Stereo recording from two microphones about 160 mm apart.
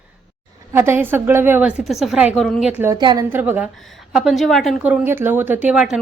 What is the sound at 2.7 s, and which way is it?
Speech, 15° right (ahead or behind).